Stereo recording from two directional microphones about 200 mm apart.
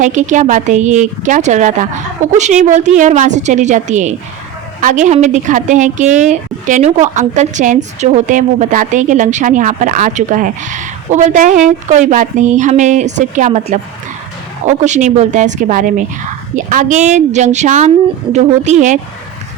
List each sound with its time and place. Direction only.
0.0 s a woman's voice: 40° right (ahead or behind)